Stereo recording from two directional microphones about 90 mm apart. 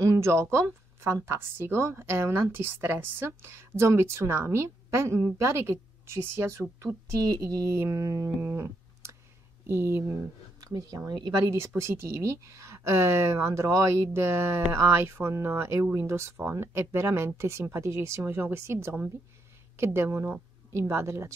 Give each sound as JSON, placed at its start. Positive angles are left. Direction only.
{"t": 0.0, "sound": "a woman's voice", "side_deg": -35}
{"t": 7.2, "sound": "speech", "side_deg": -45}
{"t": 8.4, "sound": "music", "side_deg": -25}
{"t": 9.7, "sound": "a woman's voice", "side_deg": -30}
{"t": 10.6, "sound": "speech", "side_deg": -45}
{"t": 11.5, "sound": "a woman's voice", "side_deg": -30}